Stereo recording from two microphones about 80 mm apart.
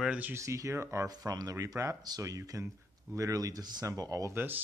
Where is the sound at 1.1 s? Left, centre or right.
Right.